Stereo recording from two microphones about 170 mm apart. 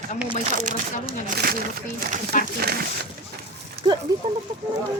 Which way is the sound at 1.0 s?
60° right (ahead or behind).